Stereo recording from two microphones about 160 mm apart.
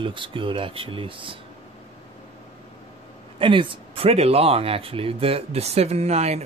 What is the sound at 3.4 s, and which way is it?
Speech, 30° right (ahead or behind).